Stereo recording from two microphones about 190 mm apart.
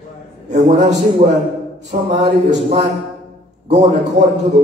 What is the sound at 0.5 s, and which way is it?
Speech, 35° right (ahead or behind).